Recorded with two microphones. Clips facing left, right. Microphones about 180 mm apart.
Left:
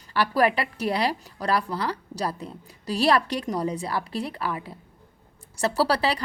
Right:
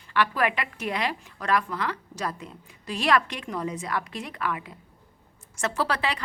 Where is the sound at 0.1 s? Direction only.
35° left (ahead or behind).